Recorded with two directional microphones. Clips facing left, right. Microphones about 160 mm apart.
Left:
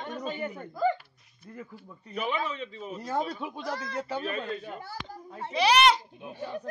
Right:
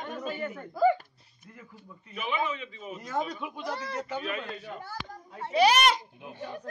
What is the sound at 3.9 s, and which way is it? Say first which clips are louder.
Speech: left 1 dB; 35° left (ahead or behind).